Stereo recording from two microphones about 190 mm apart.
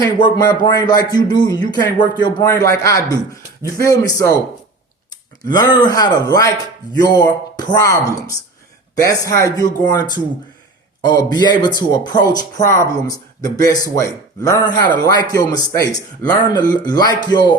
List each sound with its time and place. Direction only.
0.0 s speech: 20° left (ahead or behind)
5.4 s speech: 20° left (ahead or behind)
9.0 s speech: 15° left (ahead or behind)